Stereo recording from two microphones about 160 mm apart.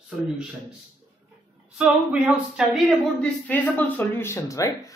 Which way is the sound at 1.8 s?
5° right (ahead or behind).